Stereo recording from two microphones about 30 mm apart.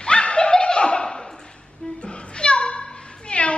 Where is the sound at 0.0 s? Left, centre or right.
Left.